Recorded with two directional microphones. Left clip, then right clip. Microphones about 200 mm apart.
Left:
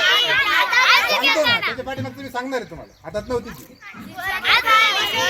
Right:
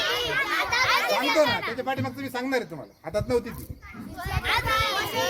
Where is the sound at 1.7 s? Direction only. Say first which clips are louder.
Left 1 dB; centre (ahead or behind).